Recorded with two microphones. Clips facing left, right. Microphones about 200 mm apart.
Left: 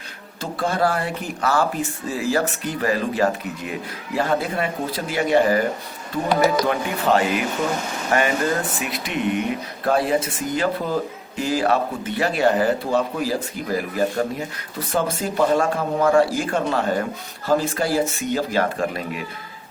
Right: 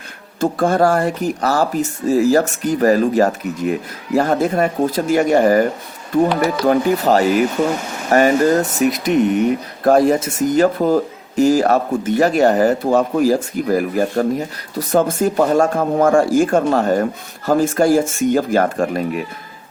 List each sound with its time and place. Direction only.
0.3 s speech: 50° right (ahead or behind)
6.7 s speech: 40° right (ahead or behind)